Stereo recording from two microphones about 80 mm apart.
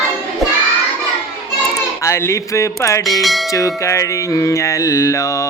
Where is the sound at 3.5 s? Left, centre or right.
Left.